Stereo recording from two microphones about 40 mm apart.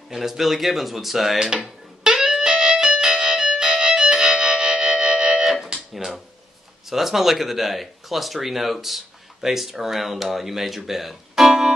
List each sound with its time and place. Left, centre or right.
0.1 s speech: centre
2.0 s music: centre
5.4 s music: centre
6.9 s speech: centre